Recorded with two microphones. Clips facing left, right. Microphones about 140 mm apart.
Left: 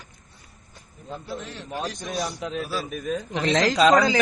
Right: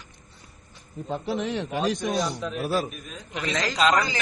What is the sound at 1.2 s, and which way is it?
Speech, 80° right.